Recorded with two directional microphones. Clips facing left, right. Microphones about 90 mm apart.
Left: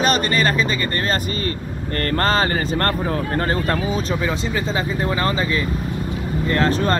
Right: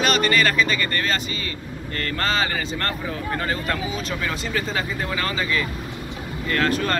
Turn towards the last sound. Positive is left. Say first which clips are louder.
# left 4 dB
turn(degrees=30)  # may be behind; listen again after turning